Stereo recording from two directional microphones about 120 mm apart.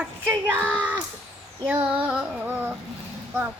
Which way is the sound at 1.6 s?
15° right (ahead or behind).